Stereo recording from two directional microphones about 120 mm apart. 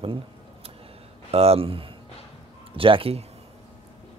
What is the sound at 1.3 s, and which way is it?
Speech, 55° right (ahead or behind).